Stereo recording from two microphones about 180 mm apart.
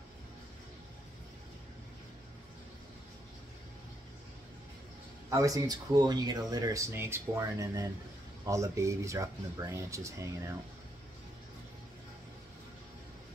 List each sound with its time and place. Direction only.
5.3 s speech: 20° right (ahead or behind)